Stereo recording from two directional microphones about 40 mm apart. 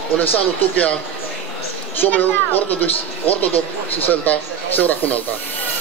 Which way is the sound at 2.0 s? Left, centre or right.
Left.